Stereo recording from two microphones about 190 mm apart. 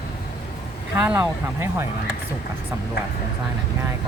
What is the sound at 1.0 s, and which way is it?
Speech, 15° right (ahead or behind).